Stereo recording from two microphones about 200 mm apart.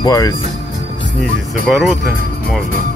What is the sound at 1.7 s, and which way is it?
Speech, centre (ahead or behind).